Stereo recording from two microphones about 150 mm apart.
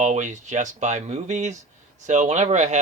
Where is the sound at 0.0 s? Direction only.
50° right (ahead or behind).